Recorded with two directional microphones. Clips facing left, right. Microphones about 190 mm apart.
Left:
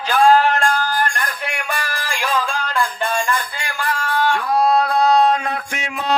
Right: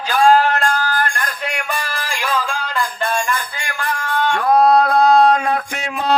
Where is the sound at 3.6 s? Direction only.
10° left (ahead or behind).